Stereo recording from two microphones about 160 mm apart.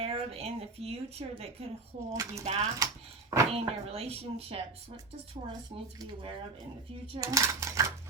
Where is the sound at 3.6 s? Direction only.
40° right (ahead or behind).